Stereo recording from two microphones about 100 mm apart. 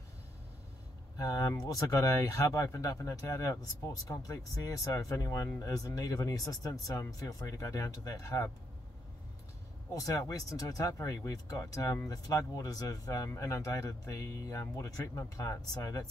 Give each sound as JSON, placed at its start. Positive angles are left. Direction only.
{"t": 1.1, "sound": "speech", "side_deg": 35}
{"t": 9.9, "sound": "speech", "side_deg": 35}